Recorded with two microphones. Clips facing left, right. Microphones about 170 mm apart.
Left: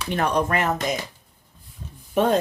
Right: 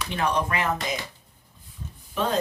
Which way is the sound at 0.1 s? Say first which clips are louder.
Left 4 dB; 45° left (ahead or behind).